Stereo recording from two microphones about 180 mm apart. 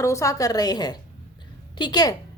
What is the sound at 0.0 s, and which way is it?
A woman's voice, 15° left (ahead or behind).